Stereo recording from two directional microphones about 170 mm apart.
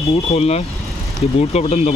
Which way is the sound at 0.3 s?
40° left (ahead or behind).